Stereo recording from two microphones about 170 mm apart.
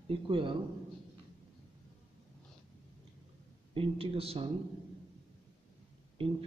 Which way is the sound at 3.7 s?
35° right (ahead or behind).